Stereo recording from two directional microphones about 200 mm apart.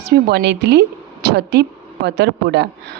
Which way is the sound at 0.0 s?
55° right (ahead or behind).